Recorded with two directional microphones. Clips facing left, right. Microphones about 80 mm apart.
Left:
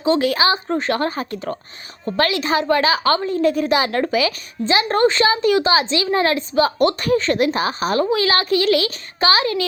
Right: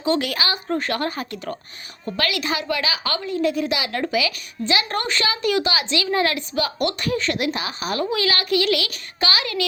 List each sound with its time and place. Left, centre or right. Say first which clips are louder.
0.0 s a woman's voice: left 5 dB; left